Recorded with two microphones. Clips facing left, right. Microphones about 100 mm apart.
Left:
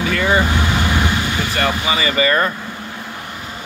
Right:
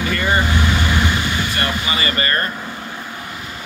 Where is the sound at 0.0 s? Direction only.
75° left (ahead or behind).